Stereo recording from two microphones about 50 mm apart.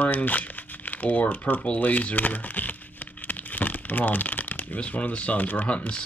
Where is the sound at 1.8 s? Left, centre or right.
Left.